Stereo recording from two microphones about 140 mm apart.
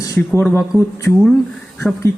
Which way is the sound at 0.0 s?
25° left (ahead or behind).